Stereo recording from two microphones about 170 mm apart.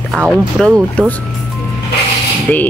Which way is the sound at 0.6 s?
5° left (ahead or behind).